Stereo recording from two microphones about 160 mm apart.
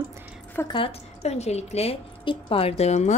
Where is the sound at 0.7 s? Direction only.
35° left (ahead or behind).